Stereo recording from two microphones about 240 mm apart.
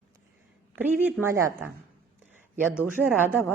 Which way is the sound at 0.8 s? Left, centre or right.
Centre.